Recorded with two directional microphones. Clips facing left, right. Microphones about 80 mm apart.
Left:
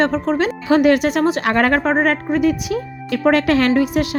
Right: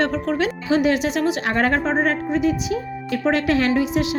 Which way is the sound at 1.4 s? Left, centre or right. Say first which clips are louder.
Left 4 dB; left.